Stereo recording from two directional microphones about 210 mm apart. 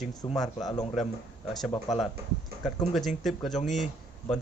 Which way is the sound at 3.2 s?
Centre (ahead or behind).